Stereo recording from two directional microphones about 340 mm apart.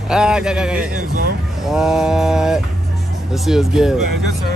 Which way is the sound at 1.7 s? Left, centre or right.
Centre.